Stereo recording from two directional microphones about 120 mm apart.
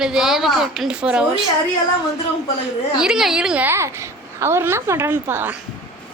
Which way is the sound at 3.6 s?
20° right (ahead or behind).